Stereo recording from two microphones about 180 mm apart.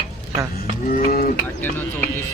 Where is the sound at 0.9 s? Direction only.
55° left (ahead or behind).